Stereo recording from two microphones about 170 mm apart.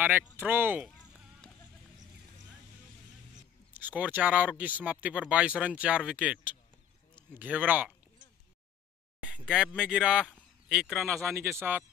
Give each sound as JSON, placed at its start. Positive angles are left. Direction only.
{"t": 0.0, "sound": "speech", "side_deg": -10}
{"t": 3.7, "sound": "speech", "side_deg": -10}
{"t": 9.2, "sound": "a sound", "side_deg": -5}
{"t": 9.8, "sound": "speech", "side_deg": -5}
{"t": 11.2, "sound": "speech", "side_deg": -15}